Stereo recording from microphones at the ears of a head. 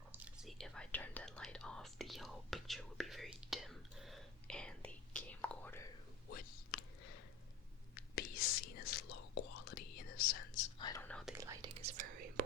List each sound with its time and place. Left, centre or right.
0.4 s whispering: centre
6.2 s a sound: left
7.9 s whispering: left
11.3 s whispering: right